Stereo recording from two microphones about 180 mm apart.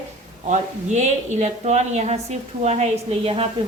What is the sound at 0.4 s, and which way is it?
A woman's voice, 40° right (ahead or behind).